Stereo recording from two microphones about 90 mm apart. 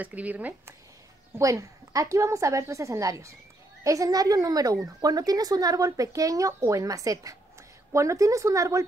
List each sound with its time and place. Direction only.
0.0 s speech: 15° right (ahead or behind)
1.4 s speech: 35° right (ahead or behind)